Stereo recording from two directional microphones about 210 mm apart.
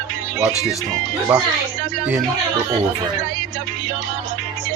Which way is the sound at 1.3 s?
5° right (ahead or behind).